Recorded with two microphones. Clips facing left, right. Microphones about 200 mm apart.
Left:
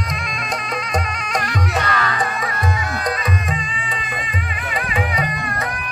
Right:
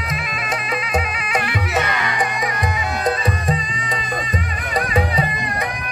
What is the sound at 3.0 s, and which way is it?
Music, 35° right (ahead or behind).